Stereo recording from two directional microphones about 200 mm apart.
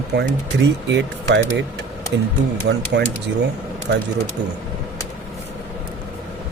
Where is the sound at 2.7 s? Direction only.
60° right (ahead or behind).